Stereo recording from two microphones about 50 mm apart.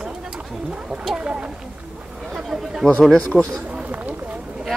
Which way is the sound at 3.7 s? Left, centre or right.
Right.